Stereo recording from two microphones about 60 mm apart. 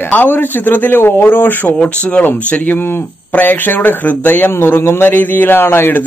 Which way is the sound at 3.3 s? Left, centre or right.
Left.